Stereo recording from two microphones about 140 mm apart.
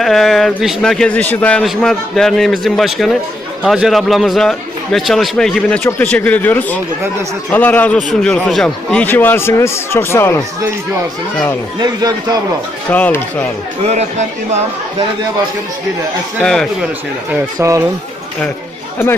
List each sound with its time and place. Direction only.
0.0 s a man's voice: centre (ahead or behind); by 10.4 s 20° left (ahead or behind)
11.8 s a man's voice: 25° right (ahead or behind)
12.9 s a man's voice: 10° left (ahead or behind)
13.8 s speech: 55° right (ahead or behind)
16.4 s a man's voice: 5° left (ahead or behind)
17.6 s a man's voice: 20° right (ahead or behind)